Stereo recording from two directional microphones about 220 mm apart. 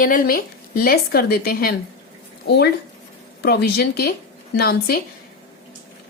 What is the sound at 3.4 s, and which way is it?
Speech, 50° left (ahead or behind).